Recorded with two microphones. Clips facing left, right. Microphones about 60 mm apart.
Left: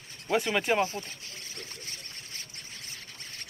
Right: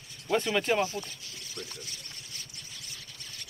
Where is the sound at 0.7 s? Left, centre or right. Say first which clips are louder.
Left 1 dB; left.